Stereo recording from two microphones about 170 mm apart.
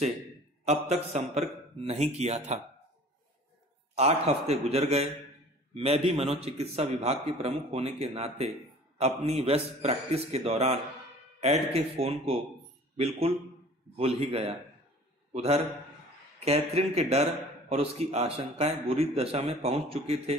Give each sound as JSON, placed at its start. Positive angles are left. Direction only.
{"t": 0.7, "sound": "a man's voice", "side_deg": -40}
{"t": 3.9, "sound": "a man's voice", "side_deg": -40}
{"t": 13.9, "sound": "a man's voice", "side_deg": -35}